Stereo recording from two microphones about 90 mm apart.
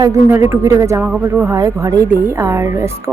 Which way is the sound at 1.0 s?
15° right (ahead or behind).